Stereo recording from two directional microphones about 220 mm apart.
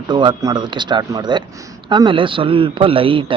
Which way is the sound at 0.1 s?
20° right (ahead or behind).